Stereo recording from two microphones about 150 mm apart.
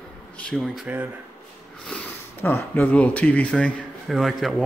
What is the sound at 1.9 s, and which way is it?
Speech, 15° left (ahead or behind).